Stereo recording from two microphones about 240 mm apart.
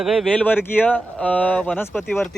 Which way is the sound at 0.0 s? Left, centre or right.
Centre.